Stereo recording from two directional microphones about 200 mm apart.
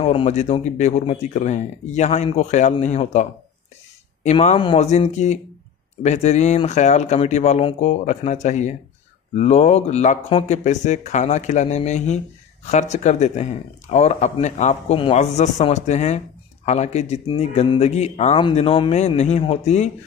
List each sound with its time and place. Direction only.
0.0 s speech: 30° left (ahead or behind)